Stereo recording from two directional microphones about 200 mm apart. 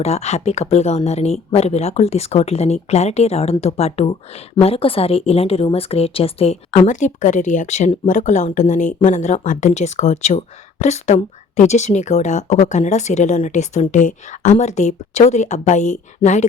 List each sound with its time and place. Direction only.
0.0 s speech: 35° left (ahead or behind)